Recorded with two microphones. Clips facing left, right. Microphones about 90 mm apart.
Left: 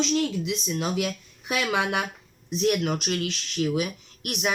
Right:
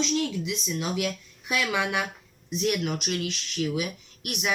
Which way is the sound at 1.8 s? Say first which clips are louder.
Left 1 dB; 50° left (ahead or behind).